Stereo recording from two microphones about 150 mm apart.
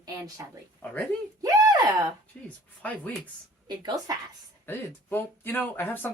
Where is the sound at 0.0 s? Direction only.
20° right (ahead or behind).